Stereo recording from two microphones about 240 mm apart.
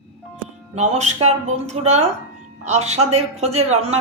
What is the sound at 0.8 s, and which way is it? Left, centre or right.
Speech, right.